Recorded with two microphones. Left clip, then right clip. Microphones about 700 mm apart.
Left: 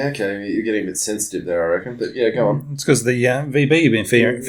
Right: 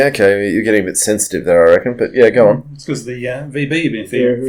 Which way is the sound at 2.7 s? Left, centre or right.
Left.